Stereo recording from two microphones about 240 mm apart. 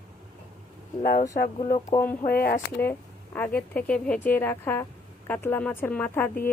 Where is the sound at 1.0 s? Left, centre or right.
Left.